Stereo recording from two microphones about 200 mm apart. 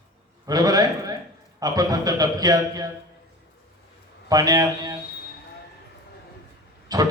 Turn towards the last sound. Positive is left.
turn(degrees=-20)  # may be behind; listen again after turning